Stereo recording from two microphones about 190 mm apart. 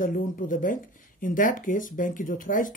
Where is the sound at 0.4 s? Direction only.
45° left (ahead or behind).